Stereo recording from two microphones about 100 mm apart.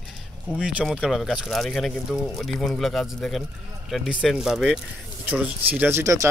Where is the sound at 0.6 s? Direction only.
10° right (ahead or behind).